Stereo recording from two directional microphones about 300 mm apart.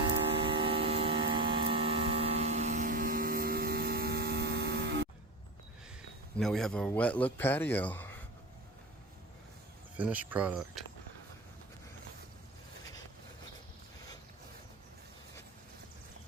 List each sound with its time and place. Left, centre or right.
0.3 s vehicle: centre; by 5.0 s right
6.3 s a man's voice: centre
10.0 s a man's voice: centre